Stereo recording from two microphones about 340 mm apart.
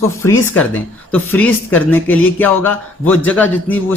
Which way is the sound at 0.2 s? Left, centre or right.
Centre.